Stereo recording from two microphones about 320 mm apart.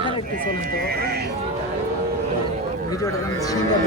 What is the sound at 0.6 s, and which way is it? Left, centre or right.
Speech, right.